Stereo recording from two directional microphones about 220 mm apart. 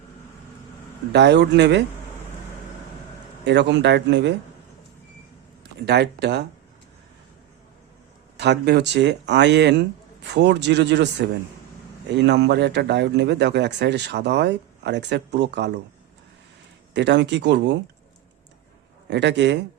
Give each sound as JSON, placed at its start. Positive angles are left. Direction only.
{"t": 1.1, "sound": "a man's voice", "side_deg": -50}
{"t": 3.4, "sound": "a man's voice", "side_deg": -50}
{"t": 5.8, "sound": "a man's voice", "side_deg": -50}
{"t": 8.4, "sound": "a man's voice", "side_deg": -50}
{"t": 16.9, "sound": "a man's voice", "side_deg": -50}
{"t": 19.0, "sound": "a man's voice", "side_deg": -50}